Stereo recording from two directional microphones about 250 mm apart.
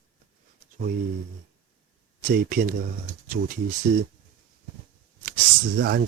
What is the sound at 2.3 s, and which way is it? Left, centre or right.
Speech, right.